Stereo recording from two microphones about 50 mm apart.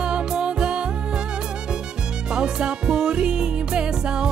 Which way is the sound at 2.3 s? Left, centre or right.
Centre.